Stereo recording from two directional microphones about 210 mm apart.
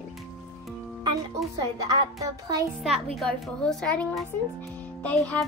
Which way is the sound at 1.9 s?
15° right (ahead or behind).